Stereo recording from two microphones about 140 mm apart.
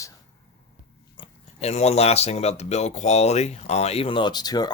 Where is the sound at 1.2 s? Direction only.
50° left (ahead or behind).